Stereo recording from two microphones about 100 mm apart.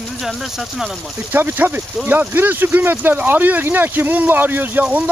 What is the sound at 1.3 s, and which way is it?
Speech, 20° right (ahead or behind).